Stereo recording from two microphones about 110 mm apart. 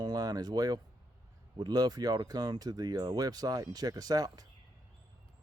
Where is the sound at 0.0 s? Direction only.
35° right (ahead or behind).